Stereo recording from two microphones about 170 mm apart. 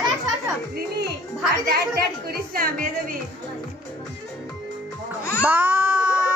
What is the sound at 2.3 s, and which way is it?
Speech, 60° right (ahead or behind).